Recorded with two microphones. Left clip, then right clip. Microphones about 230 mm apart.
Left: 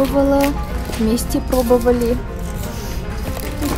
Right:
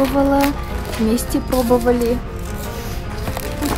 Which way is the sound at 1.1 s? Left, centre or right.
Centre.